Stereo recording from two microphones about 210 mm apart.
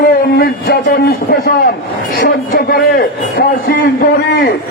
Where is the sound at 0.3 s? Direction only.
50° left (ahead or behind).